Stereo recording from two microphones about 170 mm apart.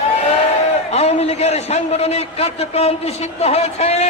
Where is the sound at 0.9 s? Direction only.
40° left (ahead or behind).